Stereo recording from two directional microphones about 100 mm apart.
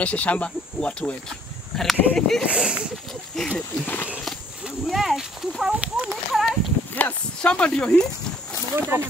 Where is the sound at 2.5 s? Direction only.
10° right (ahead or behind).